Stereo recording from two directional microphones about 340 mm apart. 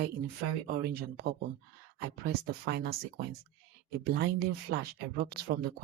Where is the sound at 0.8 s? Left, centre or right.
Right.